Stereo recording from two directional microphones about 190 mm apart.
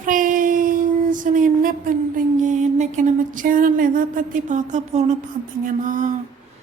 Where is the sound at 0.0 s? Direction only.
45° right (ahead or behind).